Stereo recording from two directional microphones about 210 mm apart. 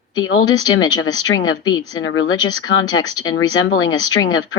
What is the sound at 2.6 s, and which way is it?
Speech, 70° left (ahead or behind).